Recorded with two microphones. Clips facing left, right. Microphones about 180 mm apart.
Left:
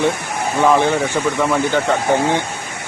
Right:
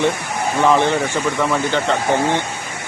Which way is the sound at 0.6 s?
10° left (ahead or behind).